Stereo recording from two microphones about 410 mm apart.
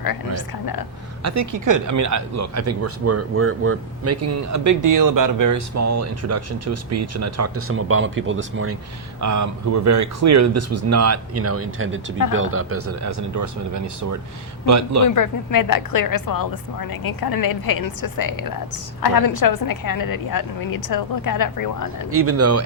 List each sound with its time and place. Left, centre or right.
0.0 s speech: left
1.2 s speech: right
9.2 s speech: right
15.0 s a woman's voice: left
22.1 s speech: right